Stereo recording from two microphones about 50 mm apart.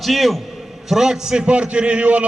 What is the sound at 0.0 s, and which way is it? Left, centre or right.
A man's voice, centre.